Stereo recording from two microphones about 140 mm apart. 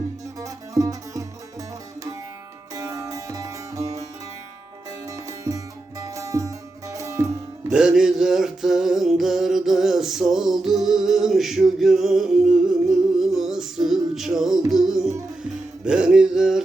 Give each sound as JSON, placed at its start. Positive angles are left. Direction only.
{"t": 0.3, "sound": "music", "side_deg": -25}
{"t": 2.7, "sound": "music", "side_deg": -25}
{"t": 5.0, "sound": "music", "side_deg": -25}
{"t": 7.7, "sound": "music", "side_deg": -5}